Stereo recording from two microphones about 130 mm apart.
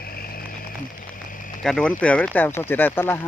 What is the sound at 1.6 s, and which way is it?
Speech, 5° left (ahead or behind).